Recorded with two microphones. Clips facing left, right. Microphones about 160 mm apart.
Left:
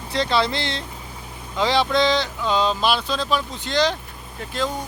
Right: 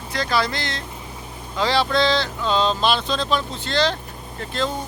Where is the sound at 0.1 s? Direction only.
25° left (ahead or behind).